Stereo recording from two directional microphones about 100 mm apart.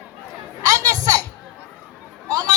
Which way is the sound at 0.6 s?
35° right (ahead or behind).